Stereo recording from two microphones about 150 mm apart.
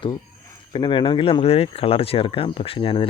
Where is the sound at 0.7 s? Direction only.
35° left (ahead or behind).